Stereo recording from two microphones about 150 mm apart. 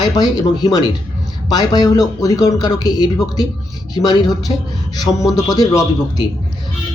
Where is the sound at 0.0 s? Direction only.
25° left (ahead or behind).